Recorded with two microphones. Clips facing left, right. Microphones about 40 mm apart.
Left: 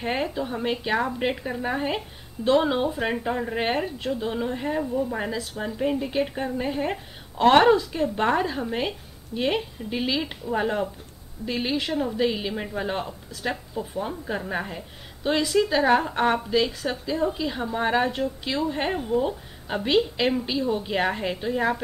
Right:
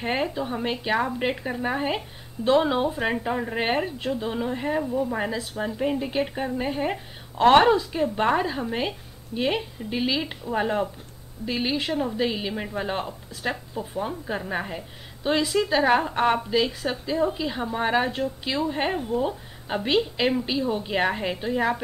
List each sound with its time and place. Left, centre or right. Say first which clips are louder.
0.0 s speech: right 1 dB; centre